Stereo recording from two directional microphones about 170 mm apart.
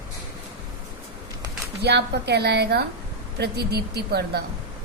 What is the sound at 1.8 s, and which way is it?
A woman's voice, 75° right (ahead or behind).